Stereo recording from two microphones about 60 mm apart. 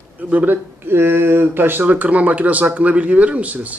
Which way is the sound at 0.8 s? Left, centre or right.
Right.